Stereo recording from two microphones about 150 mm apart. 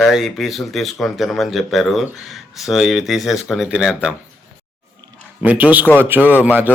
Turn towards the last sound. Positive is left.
turn(degrees=-10)  # may be behind; listen again after turning